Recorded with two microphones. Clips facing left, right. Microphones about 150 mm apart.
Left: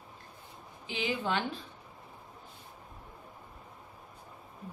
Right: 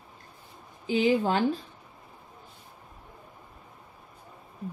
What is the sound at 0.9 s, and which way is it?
Speech, 45° right (ahead or behind).